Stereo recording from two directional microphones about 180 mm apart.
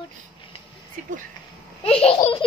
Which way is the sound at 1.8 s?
30° left (ahead or behind).